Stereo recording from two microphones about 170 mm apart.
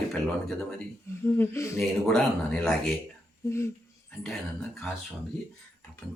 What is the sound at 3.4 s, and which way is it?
Speech, 15° left (ahead or behind).